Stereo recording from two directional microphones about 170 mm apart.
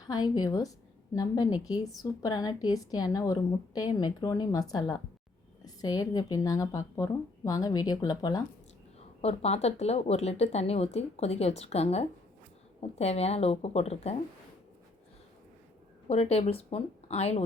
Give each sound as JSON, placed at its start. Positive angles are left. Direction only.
{"t": 0.1, "sound": "speech", "side_deg": 25}
{"t": 9.2, "sound": "speech", "side_deg": 40}
{"t": 16.0, "sound": "speech", "side_deg": 40}